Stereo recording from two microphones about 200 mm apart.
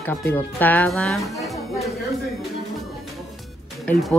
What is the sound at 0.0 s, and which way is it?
Speech, 10° left (ahead or behind).